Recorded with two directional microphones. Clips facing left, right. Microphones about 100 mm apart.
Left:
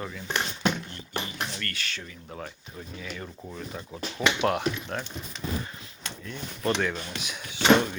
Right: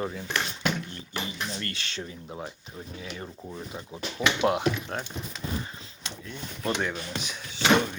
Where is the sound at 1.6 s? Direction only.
25° right (ahead or behind).